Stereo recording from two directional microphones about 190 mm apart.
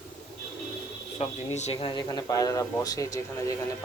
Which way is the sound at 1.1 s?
35° left (ahead or behind).